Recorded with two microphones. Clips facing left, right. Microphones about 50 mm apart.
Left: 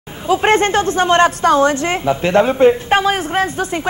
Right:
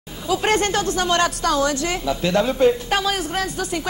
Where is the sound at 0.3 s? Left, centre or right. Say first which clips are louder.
Left 6 dB; left.